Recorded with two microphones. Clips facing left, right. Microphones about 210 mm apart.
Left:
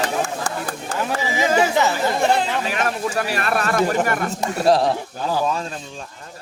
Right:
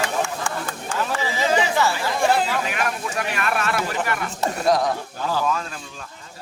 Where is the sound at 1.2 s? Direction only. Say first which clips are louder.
Left 3 dB; 15° left (ahead or behind).